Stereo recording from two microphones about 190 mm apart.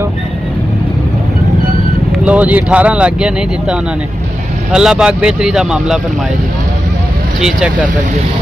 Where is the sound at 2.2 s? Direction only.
5° right (ahead or behind).